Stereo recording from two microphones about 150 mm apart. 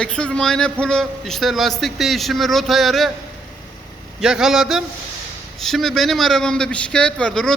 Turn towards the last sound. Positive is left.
turn(degrees=5)  # may be behind; listen again after turning